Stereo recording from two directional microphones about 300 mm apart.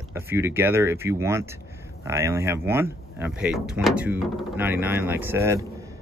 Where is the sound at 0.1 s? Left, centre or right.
Centre.